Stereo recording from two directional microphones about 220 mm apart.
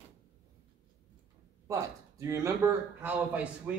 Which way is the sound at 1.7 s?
15° right (ahead or behind).